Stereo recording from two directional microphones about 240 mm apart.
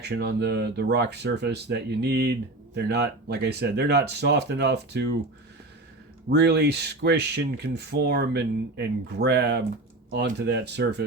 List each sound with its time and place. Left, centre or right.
0.0 s speech: right
6.3 s speech: right